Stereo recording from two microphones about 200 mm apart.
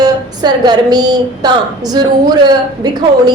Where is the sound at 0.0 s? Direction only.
20° right (ahead or behind).